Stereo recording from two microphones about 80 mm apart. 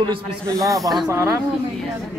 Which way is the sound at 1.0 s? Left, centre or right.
Right.